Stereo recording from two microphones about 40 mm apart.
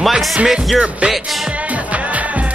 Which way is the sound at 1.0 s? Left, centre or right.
Right.